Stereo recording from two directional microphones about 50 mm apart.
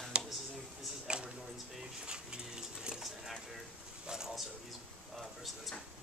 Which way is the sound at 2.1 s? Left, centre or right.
Centre.